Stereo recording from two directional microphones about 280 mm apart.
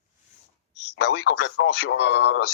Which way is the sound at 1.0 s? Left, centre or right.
Left.